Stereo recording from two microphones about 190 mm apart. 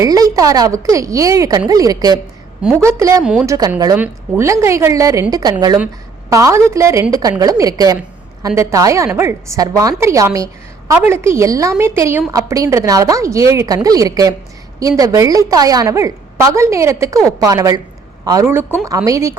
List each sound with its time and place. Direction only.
0.0 s a woman's voice: 20° right (ahead or behind)